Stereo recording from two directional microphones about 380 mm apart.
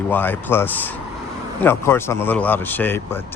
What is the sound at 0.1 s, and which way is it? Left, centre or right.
Speech, centre.